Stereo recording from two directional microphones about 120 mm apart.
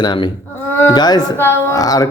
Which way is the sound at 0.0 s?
40° left (ahead or behind).